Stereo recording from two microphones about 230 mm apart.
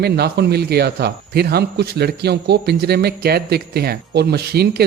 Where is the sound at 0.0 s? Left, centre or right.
Right.